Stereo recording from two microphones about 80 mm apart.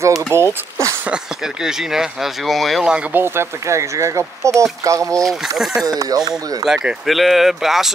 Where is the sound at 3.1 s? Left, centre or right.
Right.